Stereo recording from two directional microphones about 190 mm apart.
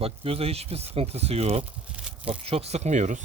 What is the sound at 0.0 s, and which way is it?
Speech, 30° right (ahead or behind).